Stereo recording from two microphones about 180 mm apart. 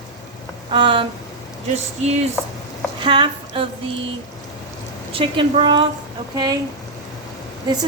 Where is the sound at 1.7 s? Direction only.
35° right (ahead or behind).